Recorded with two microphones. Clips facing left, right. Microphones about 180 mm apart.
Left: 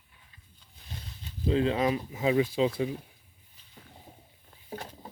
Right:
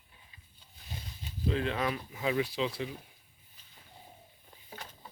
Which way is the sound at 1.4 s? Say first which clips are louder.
Left 6 dB; 30° left (ahead or behind).